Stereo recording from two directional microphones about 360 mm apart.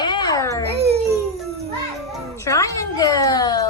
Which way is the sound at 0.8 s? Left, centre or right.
Right.